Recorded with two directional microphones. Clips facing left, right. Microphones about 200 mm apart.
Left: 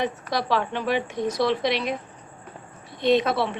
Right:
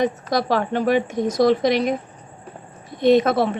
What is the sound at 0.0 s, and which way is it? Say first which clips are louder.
A woman's voice: right 6 dB; 45° right (ahead or behind).